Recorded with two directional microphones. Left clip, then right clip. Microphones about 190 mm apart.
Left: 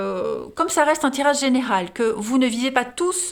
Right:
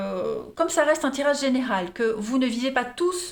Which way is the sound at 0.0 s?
45° left (ahead or behind).